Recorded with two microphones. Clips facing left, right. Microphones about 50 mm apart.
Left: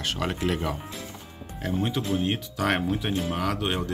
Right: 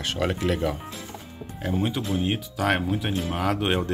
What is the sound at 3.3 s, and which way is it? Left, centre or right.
Speech, centre.